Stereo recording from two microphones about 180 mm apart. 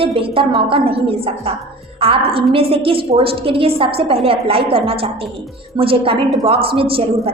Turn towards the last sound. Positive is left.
turn(degrees=-30)  # may be behind; listen again after turning